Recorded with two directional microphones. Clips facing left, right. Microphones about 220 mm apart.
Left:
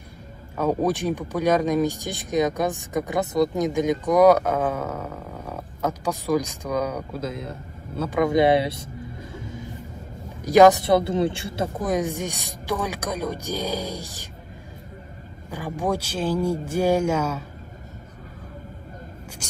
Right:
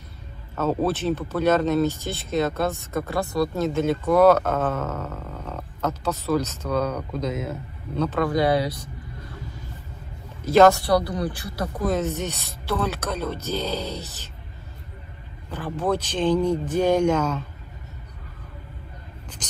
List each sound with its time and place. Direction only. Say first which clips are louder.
0.6 s speech: left 1 dB; 15° left (ahead or behind)
8.2 s speech: left 4 dB; 20° left (ahead or behind)
10.4 s speech: left 1 dB; 15° left (ahead or behind)
15.5 s speech: right 1 dB; 10° left (ahead or behind)